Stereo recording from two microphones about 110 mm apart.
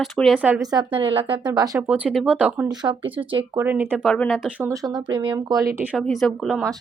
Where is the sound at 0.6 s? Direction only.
35° right (ahead or behind).